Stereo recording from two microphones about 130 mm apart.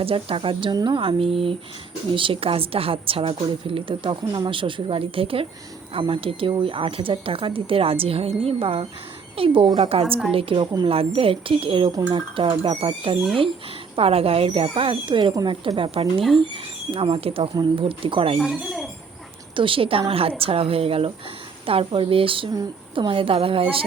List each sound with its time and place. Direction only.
0.0 s a woman's voice: 45° right (ahead or behind)
9.9 s a woman's voice: 50° right (ahead or behind)
11.9 s speech: 30° right (ahead or behind)
12.1 s a woman's voice: 40° right (ahead or behind)
18.3 s speech: centre (ahead or behind)
19.5 s a woman's voice: 40° right (ahead or behind)